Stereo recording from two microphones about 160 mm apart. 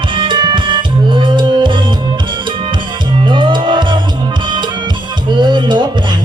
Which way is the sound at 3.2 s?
30° right (ahead or behind).